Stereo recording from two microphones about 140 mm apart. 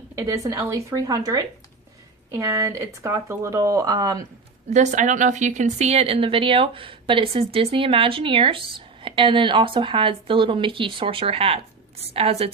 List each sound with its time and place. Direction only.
0.2 s speech: 20° right (ahead or behind)
4.7 s a woman's voice: 60° right (ahead or behind)